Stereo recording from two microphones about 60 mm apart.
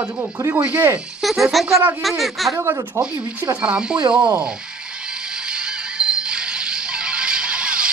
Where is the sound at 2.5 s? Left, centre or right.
Right.